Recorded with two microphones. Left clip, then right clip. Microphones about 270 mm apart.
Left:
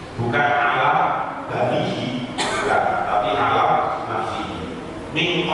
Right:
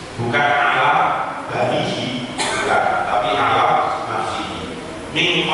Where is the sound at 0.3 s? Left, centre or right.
Centre.